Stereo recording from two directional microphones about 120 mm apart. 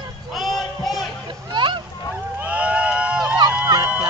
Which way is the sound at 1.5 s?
40° right (ahead or behind).